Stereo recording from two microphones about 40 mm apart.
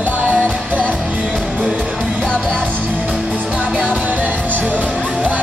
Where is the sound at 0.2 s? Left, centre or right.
Right.